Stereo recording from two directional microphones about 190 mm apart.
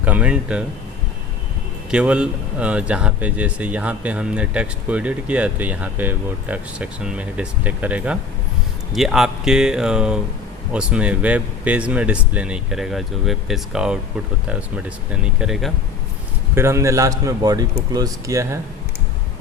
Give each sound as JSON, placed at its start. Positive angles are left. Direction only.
{"t": 0.0, "sound": "speech", "side_deg": -5}
{"t": 1.9, "sound": "speech", "side_deg": -5}
{"t": 16.6, "sound": "speech", "side_deg": -15}